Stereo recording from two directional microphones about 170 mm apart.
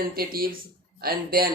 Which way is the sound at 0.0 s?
60° right (ahead or behind).